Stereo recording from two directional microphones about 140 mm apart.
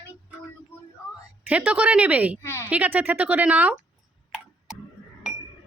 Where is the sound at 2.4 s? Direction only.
15° left (ahead or behind).